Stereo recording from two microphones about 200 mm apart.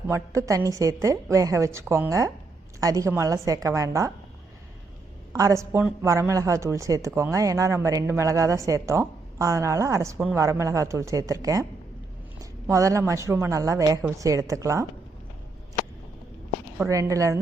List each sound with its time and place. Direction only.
0.1 s speech: 15° right (ahead or behind)
5.3 s speech: 15° right (ahead or behind)
12.7 s speech: 15° right (ahead or behind)
16.8 s speech: 15° right (ahead or behind)